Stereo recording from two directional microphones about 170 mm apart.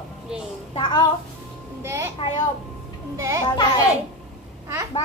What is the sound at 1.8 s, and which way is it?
Speech, 15° right (ahead or behind).